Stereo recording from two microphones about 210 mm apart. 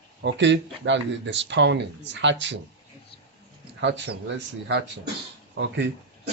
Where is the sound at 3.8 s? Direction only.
55° right (ahead or behind).